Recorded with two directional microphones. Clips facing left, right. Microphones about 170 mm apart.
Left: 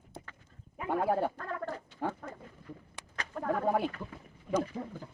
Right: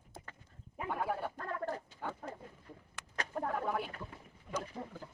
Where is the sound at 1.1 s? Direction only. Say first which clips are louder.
Left 8 dB; 65° left (ahead or behind).